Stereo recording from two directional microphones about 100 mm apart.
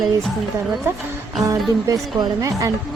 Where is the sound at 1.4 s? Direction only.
35° right (ahead or behind).